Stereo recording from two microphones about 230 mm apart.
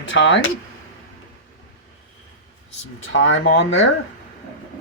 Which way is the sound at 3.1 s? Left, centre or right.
Left.